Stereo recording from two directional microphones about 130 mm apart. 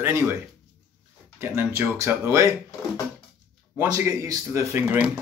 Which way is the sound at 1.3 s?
20° right (ahead or behind).